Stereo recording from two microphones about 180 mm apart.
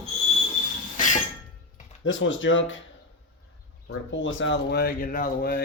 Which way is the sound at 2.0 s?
90° left.